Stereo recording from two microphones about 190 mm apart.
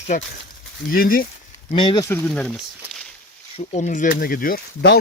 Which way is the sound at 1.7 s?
25° left (ahead or behind).